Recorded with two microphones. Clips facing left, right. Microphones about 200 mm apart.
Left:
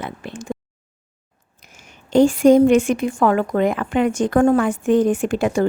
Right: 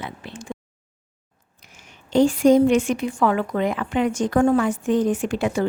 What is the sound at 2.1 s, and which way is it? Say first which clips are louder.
A woman's voice: left 3 dB; 50° left (ahead or behind).